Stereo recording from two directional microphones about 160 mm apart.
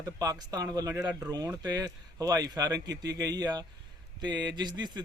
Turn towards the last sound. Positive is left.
turn(degrees=-25)  # may be behind; listen again after turning